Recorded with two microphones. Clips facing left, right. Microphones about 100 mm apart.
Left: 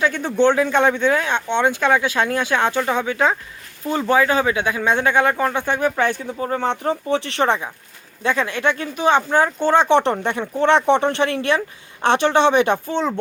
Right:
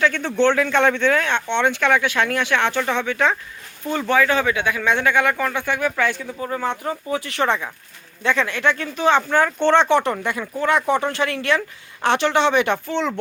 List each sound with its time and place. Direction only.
0.0 s speech: 15° left (ahead or behind)
2.7 s speech: 15° left (ahead or behind)
4.1 s speech: 25° left (ahead or behind)
5.7 s speech: 35° left (ahead or behind); by 9.9 s 10° left (ahead or behind)
9.9 s speech: 25° left (ahead or behind)